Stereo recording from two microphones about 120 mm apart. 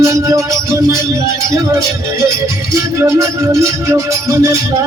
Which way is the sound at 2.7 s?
25° right (ahead or behind).